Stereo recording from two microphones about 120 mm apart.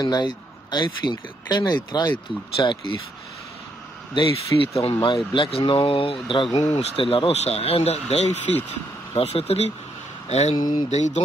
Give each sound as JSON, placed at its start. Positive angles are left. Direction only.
{"t": 0.0, "sound": "speech", "side_deg": 35}
{"t": 4.6, "sound": "speech", "side_deg": 55}
{"t": 10.5, "sound": "speech", "side_deg": 35}
{"t": 10.9, "sound": "mantra", "side_deg": 70}